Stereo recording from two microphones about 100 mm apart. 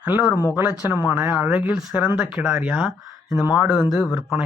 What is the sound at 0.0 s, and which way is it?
Speech, 15° right (ahead or behind).